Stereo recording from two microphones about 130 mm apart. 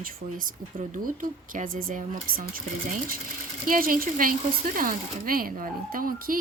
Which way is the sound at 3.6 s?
90° right.